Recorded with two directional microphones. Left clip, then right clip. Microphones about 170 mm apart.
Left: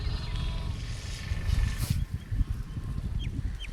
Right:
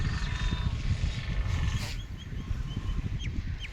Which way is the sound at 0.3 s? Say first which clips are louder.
Right 4 dB; 40° right (ahead or behind).